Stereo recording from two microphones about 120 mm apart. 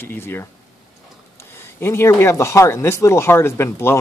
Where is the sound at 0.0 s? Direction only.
20° left (ahead or behind).